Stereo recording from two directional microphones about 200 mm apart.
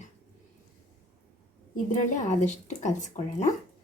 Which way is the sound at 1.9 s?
35° left (ahead or behind).